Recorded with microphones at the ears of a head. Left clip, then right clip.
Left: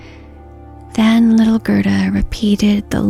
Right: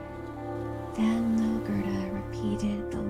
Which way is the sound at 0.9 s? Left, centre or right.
Left.